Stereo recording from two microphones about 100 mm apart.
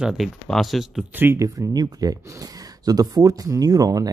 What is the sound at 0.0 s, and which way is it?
Speech, centre (ahead or behind).